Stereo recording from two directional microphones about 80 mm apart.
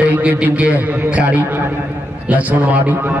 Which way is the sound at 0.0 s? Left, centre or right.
Centre.